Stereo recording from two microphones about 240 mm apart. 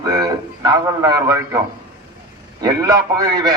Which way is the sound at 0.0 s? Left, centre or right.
Centre.